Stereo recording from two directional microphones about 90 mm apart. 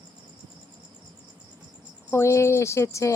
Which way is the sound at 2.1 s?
30° left (ahead or behind).